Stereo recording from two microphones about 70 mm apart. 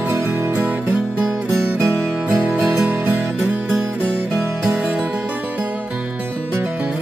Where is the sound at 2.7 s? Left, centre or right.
Right.